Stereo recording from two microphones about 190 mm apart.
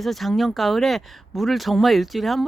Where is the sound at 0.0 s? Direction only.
Centre (ahead or behind).